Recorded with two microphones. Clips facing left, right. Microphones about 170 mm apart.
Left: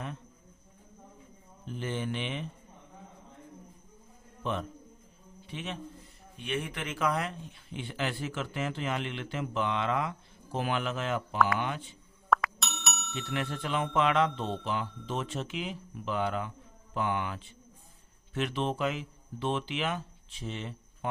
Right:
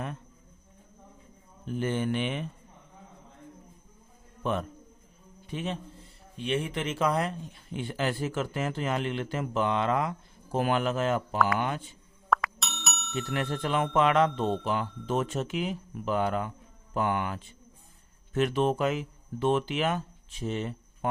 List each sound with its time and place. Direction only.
1.6 s speech: 50° right (ahead or behind)
5.5 s a man's voice: 40° right (ahead or behind)
6.3 s speech: 30° right (ahead or behind)
11.3 s speech: centre (ahead or behind)
12.3 s music: centre (ahead or behind)
13.3 s speech: 40° right (ahead or behind)